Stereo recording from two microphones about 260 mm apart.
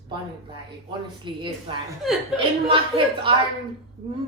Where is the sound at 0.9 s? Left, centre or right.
Centre.